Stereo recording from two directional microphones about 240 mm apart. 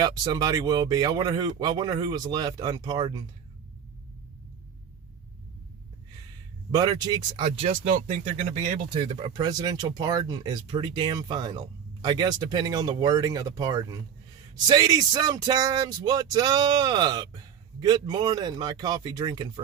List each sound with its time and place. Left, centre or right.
0.0 s speech: centre
6.7 s speech: centre; by 8.8 s right
8.9 s speech: right